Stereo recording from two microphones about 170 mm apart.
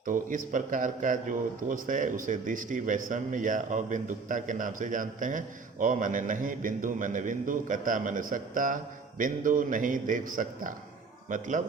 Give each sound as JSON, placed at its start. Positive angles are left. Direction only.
{"t": 0.0, "sound": "a man's voice", "side_deg": -50}